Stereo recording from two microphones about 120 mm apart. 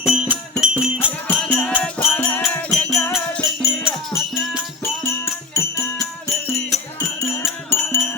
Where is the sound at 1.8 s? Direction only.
10° left (ahead or behind).